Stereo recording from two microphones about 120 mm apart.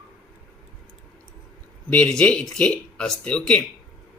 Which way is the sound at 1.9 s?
10° left (ahead or behind).